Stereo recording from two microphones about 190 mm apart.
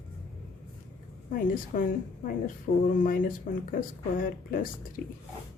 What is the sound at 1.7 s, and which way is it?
Speech, 45° left (ahead or behind).